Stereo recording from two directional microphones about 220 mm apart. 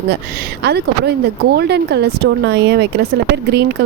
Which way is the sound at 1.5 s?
50° right (ahead or behind).